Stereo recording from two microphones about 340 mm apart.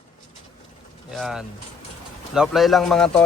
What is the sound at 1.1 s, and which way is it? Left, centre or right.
Pigeon, centre.